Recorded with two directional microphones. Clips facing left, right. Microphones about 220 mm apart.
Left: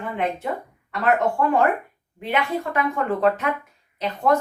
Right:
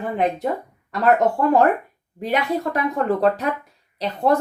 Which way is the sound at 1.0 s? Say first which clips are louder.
Right 3 dB; 40° right (ahead or behind).